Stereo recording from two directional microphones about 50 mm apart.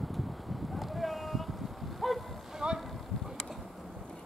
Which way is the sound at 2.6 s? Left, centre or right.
Centre.